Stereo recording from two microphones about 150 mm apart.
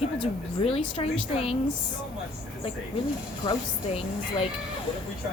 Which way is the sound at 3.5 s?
40° left (ahead or behind).